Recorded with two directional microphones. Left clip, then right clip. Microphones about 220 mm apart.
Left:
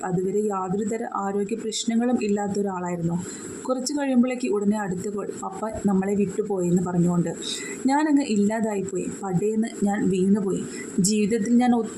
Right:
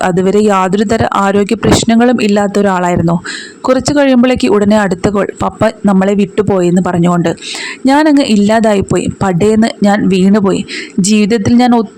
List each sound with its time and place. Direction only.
0.0 s a man's voice: 45° right (ahead or behind)